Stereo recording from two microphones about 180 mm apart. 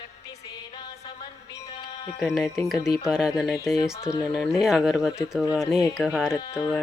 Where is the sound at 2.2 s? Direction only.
Centre (ahead or behind).